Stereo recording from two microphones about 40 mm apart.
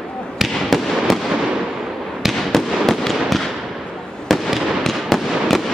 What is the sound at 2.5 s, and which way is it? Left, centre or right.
Fireworks, centre.